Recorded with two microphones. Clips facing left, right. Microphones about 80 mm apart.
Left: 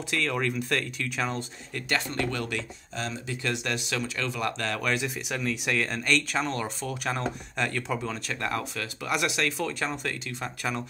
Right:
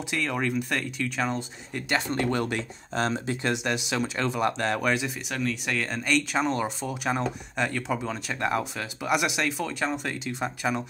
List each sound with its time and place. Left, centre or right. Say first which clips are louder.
0.1 s speech: even; centre
1.7 s speech: right 3 dB; centre
2.9 s speech: right 7 dB; right
3.4 s speech: right 2 dB; centre
4.9 s speech: right 1 dB; centre